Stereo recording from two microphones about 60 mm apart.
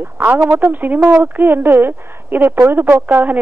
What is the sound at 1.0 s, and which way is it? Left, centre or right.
Speech, centre.